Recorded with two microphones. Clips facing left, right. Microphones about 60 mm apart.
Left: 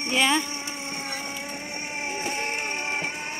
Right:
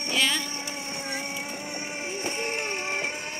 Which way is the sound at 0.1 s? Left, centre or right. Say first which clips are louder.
Left 4 dB; left.